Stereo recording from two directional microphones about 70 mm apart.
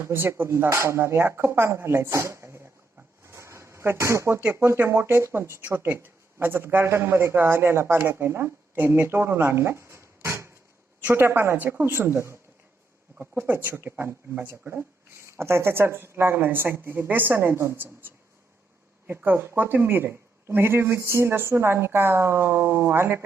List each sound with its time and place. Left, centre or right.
0.0 s speech: right
3.2 s a sound: right
4.5 s speech: right
11.0 s speech: right
13.4 s speech: right
15.2 s speech: right
19.0 s speech: right